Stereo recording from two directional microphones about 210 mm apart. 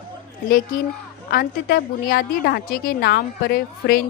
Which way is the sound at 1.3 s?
45° left (ahead or behind).